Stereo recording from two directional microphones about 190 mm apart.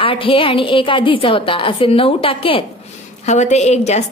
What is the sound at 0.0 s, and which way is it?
A woman's voice, 30° left (ahead or behind).